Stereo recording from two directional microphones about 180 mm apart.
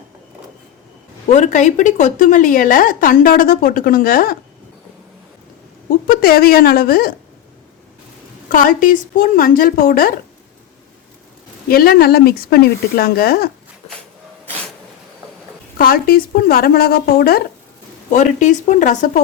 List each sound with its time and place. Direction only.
1.3 s a woman's voice: 40° left (ahead or behind)
5.9 s a woman's voice: 55° left (ahead or behind)
8.4 s a woman's voice: 50° left (ahead or behind)
11.7 s speech: 55° left (ahead or behind)
15.8 s speech: 55° left (ahead or behind)
18.1 s a woman's voice: 40° left (ahead or behind)